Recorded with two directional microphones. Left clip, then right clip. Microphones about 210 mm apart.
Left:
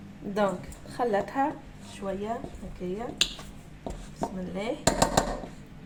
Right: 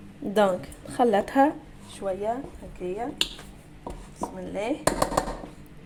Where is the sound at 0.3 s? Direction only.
45° right (ahead or behind).